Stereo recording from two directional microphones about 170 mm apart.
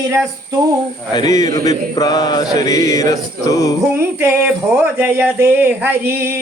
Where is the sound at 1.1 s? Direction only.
20° left (ahead or behind).